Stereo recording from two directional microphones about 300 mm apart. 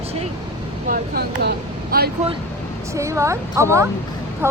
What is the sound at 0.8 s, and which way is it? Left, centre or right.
Speech, right.